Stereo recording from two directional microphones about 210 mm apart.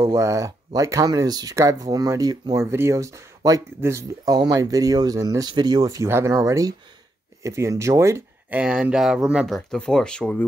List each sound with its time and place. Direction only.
0.0 s speech: 15° right (ahead or behind); by 10.4 s 5° left (ahead or behind)